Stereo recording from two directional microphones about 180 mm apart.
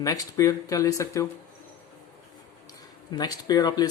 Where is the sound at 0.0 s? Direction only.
20° left (ahead or behind).